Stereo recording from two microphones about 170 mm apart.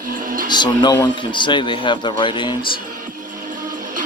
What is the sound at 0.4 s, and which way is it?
Speech, 25° left (ahead or behind).